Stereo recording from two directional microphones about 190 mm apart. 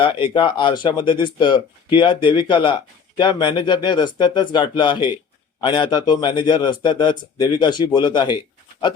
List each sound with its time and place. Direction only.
0.0 s a man's voice: 25° left (ahead or behind)